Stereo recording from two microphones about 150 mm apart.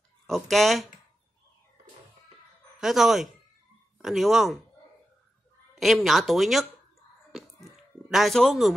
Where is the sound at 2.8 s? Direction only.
Centre (ahead or behind).